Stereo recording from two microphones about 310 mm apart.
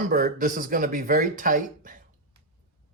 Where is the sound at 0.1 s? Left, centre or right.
Right.